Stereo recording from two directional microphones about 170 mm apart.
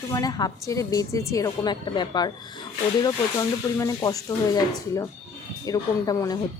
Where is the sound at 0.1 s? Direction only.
20° left (ahead or behind).